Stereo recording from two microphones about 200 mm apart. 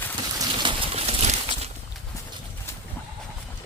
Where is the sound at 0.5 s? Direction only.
25° right (ahead or behind).